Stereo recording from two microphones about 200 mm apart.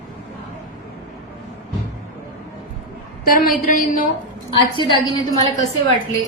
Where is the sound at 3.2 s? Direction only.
45° left (ahead or behind).